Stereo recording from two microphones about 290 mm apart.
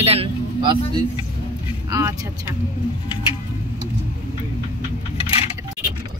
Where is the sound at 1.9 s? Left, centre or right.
Centre.